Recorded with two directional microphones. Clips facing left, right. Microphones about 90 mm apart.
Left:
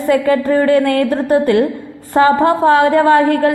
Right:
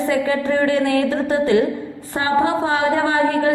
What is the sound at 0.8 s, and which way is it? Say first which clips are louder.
A woman's voice: left 3 dB; 55° left (ahead or behind).